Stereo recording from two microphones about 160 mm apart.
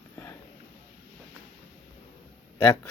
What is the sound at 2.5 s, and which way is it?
Speech, 20° left (ahead or behind).